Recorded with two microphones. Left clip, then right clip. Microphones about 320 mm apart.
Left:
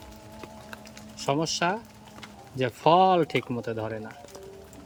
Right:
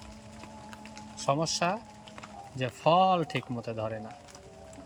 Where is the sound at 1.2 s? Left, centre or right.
Centre.